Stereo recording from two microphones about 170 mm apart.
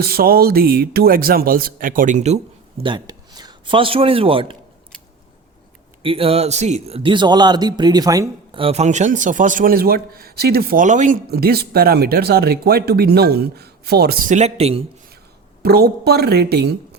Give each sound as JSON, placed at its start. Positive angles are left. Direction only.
{"t": 0.0, "sound": "speech", "side_deg": -60}
{"t": 2.8, "sound": "a man's voice", "side_deg": -25}
{"t": 6.0, "sound": "a man's voice", "side_deg": -35}
{"t": 8.5, "sound": "speech", "side_deg": -35}
{"t": 11.3, "sound": "speech", "side_deg": -65}
{"t": 15.6, "sound": "a woman's voice", "side_deg": -70}